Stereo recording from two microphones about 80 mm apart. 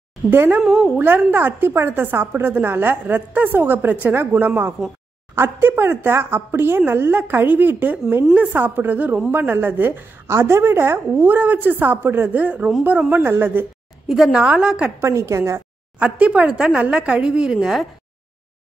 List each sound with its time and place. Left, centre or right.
0.3 s a woman's voice: right
14.0 s speech: centre
15.0 s speech: right
16.0 s speech: centre